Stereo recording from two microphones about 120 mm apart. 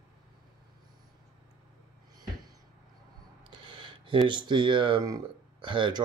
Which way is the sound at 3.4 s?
45° right (ahead or behind).